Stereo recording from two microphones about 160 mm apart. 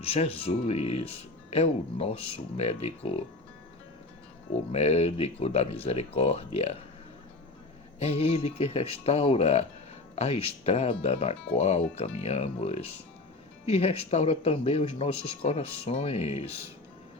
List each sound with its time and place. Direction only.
0.0 s speech: 35° left (ahead or behind)
4.7 s speech: 40° left (ahead or behind)
7.9 s speech: 40° left (ahead or behind)